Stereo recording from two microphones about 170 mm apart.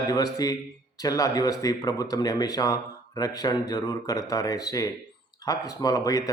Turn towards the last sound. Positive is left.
turn(degrees=20)  # may be behind; listen again after turning